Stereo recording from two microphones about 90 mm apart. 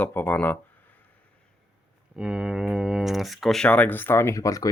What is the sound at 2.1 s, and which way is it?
Speech, 10° right (ahead or behind).